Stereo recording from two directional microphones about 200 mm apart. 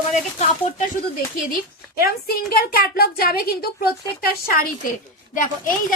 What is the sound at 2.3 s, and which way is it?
A woman's voice, 50° left (ahead or behind).